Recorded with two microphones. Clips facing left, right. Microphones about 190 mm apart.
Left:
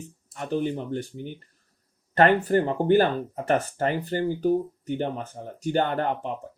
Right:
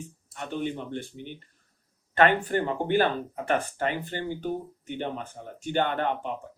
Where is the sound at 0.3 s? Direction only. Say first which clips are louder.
Left 4 dB; 40° left (ahead or behind).